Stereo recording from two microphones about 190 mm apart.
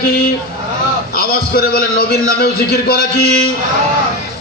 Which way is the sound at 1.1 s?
55° left (ahead or behind).